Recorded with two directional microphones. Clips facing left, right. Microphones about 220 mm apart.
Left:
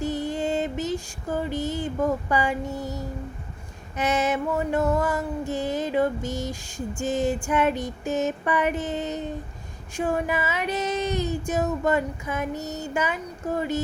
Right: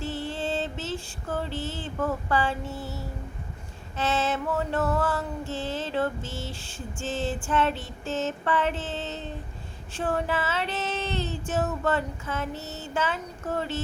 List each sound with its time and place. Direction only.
0.0 s female singing: 15° left (ahead or behind)
3.9 s music: 15° left (ahead or behind)
12.6 s a sound: 40° left (ahead or behind)
12.9 s music: 15° left (ahead or behind)